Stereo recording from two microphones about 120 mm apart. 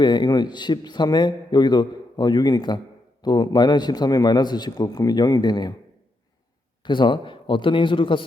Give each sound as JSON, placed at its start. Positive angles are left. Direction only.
{"t": 0.0, "sound": "a man's voice", "side_deg": 40}
{"t": 6.8, "sound": "a man's voice", "side_deg": 40}